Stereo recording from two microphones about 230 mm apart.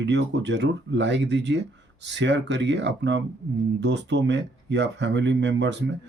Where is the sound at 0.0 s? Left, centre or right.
Right.